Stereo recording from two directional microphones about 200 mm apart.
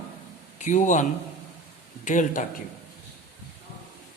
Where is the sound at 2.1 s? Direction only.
40° left (ahead or behind).